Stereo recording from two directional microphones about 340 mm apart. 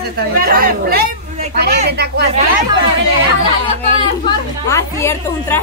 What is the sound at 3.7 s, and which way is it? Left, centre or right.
Speech, centre.